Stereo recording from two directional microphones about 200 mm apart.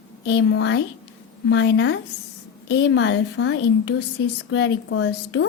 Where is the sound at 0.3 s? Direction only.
75° left (ahead or behind).